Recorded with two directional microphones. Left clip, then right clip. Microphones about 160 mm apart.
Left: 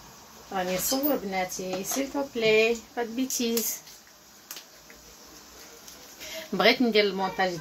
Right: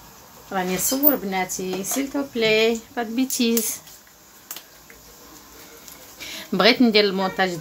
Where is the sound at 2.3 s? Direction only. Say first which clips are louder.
Right 3 dB; 35° right (ahead or behind).